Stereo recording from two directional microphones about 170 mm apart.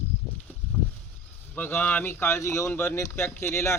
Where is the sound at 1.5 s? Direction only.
10° left (ahead or behind).